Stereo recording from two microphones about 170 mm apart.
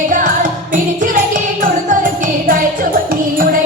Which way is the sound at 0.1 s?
50° right (ahead or behind).